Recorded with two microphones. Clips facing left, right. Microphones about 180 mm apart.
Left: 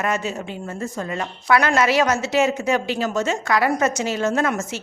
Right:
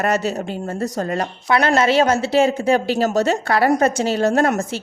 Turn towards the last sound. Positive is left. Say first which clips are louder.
# right 4 dB
turn(degrees=-35)  # may be behind; listen again after turning